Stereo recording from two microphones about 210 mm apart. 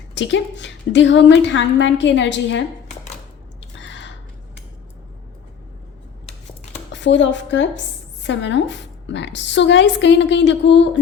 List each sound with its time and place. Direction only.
0.1 s a woman's voice: 60° left (ahead or behind)
3.6 s a sound: 60° left (ahead or behind)
6.9 s a woman's voice: 60° left (ahead or behind)